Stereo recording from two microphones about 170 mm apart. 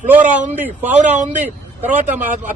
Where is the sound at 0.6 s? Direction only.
10° right (ahead or behind).